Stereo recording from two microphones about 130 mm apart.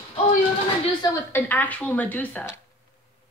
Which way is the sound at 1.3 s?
15° left (ahead or behind).